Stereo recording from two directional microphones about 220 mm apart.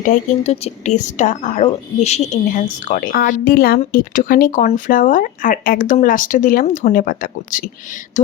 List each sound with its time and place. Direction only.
0.1 s a woman's voice: 30° left (ahead or behind)